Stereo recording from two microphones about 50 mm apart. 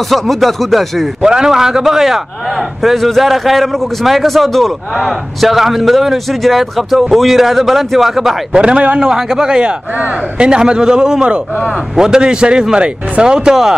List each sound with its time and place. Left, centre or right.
0.1 s a man's voice: centre
1.2 s a man's voice: centre
8.5 s a man's voice: right
9.1 s speech: centre